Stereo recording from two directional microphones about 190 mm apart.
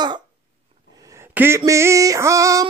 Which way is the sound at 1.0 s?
15° right (ahead or behind).